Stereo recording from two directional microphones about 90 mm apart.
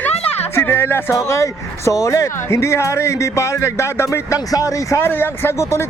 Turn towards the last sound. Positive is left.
turn(degrees=30)  # may be behind; listen again after turning